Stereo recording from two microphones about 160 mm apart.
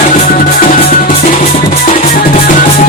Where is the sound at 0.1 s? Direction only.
60° left (ahead or behind).